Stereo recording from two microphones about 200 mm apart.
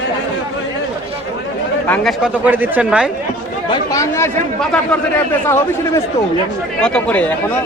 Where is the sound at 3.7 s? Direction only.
15° left (ahead or behind).